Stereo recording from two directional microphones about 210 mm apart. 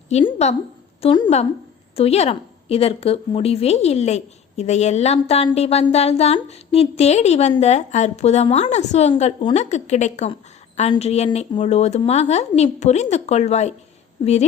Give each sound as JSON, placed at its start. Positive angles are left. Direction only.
{"t": 0.1, "sound": "a woman's voice", "side_deg": 30}